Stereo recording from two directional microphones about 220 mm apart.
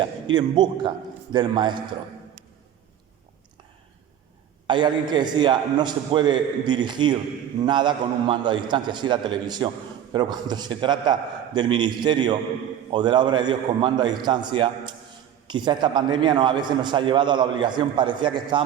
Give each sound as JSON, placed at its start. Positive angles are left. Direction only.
{"t": 0.3, "sound": "a man's voice", "side_deg": -20}
{"t": 4.6, "sound": "a man's voice", "side_deg": -20}